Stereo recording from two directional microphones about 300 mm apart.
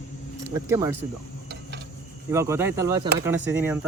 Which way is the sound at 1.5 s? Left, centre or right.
Right.